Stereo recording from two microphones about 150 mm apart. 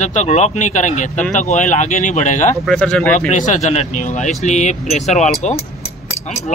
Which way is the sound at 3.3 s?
55° left (ahead or behind).